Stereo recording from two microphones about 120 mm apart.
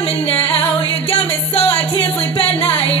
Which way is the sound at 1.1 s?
55° left (ahead or behind).